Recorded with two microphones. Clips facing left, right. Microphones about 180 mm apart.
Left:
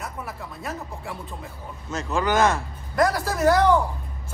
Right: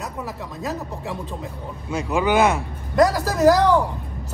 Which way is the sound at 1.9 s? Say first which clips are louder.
Right 3 dB; 10° right (ahead or behind).